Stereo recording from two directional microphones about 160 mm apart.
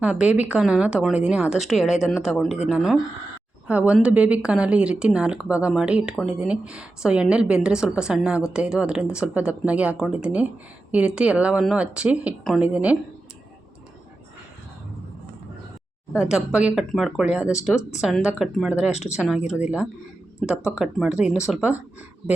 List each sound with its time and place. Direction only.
0.0 s a woman's voice: 5° right (ahead or behind)
16.1 s a woman's voice: 5° right (ahead or behind)
20.5 s a woman's voice: 5° right (ahead or behind)